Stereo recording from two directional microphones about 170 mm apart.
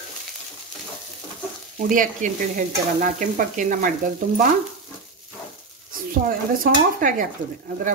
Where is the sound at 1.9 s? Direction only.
50° right (ahead or behind).